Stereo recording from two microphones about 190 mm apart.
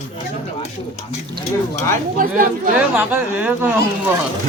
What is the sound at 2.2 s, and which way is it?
Speech, 45° right (ahead or behind).